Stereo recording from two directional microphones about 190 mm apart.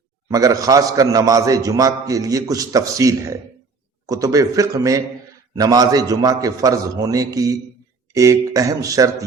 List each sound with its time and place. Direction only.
0.3 s a man's voice: 20° right (ahead or behind)